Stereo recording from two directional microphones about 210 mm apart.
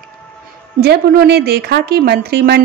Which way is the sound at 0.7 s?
50° right (ahead or behind).